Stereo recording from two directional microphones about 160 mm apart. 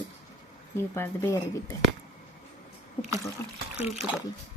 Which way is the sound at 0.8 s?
15° left (ahead or behind).